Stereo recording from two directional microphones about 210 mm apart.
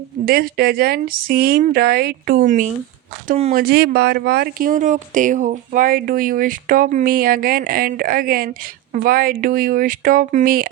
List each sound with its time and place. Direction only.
0.3 s speech: 45° right (ahead or behind); by 3.5 s 30° right (ahead or behind)
3.5 s speech: 45° right (ahead or behind)